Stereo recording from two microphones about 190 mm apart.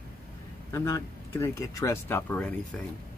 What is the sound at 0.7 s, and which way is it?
Speech, 15° left (ahead or behind).